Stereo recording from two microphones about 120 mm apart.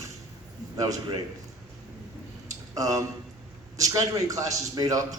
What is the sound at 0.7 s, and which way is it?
Speech, 30° right (ahead or behind).